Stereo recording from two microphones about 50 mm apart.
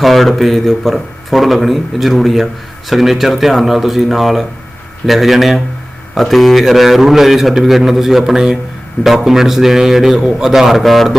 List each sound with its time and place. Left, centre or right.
0.0 s a man's voice: centre